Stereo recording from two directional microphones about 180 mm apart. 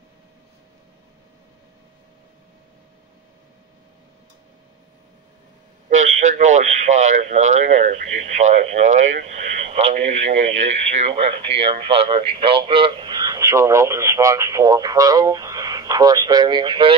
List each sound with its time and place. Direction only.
5.9 s speech: 40° right (ahead or behind); by 16.9 s 25° right (ahead or behind)